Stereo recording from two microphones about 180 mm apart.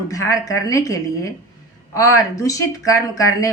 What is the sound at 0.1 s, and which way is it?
Speech, 20° left (ahead or behind).